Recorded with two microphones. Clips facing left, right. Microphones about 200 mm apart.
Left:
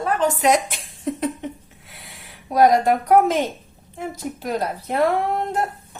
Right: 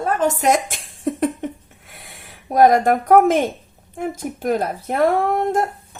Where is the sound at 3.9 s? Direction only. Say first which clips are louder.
Right 4 dB; 50° right (ahead or behind).